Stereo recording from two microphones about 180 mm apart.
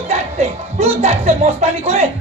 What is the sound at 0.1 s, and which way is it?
A man's voice, 35° right (ahead or behind).